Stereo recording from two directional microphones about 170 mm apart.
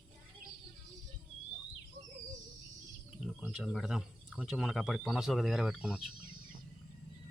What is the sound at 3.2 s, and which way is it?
Speech, centre (ahead or behind).